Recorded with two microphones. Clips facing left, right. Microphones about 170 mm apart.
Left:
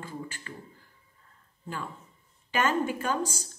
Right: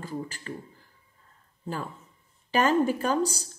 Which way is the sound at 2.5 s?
35° right (ahead or behind).